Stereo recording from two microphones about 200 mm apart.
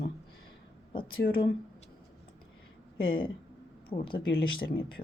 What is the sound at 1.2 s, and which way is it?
Speech, 50° left (ahead or behind).